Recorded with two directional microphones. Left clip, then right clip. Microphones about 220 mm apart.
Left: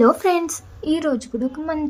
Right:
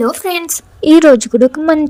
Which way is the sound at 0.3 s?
40° right (ahead or behind).